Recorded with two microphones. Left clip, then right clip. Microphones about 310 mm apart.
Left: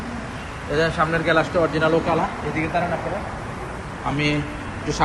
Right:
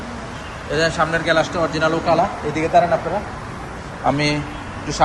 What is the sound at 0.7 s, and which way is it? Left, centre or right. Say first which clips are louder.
A man's voice: right 2 dB; centre.